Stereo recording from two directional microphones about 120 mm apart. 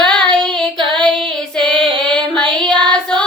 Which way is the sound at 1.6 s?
5° left (ahead or behind).